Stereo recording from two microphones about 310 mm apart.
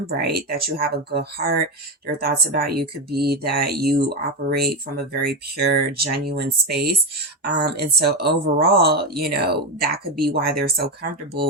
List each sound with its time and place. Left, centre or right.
0.2 s speech: right